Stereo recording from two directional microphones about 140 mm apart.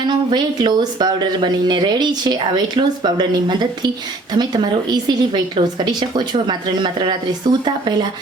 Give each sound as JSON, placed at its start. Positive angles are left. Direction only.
{"t": 0.0, "sound": "speech", "side_deg": -30}